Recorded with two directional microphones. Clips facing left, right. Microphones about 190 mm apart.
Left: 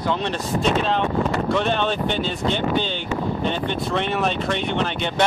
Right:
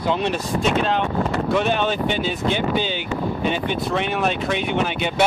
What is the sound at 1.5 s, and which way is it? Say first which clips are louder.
Speech: right 3 dB; 5° right (ahead or behind).